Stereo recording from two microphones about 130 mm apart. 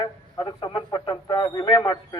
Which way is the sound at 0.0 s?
35° left (ahead or behind).